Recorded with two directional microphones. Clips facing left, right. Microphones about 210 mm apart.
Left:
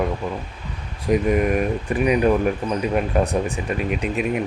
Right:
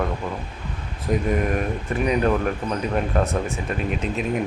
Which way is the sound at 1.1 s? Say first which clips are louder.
Left 4 dB; 10° left (ahead or behind).